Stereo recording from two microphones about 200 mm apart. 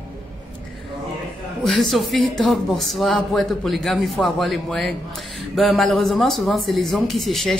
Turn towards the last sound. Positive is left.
turn(degrees=0)  # may be behind; listen again after turning